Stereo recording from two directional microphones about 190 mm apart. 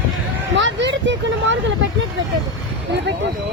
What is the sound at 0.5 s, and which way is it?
Speech, 70° right (ahead or behind).